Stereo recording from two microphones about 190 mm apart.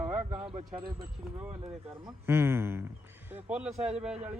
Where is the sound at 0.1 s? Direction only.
30° right (ahead or behind).